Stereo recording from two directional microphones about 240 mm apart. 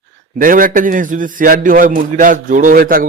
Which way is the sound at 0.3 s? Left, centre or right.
Right.